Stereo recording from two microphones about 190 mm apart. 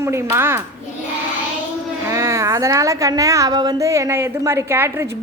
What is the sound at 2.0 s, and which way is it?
A woman's voice, 15° right (ahead or behind).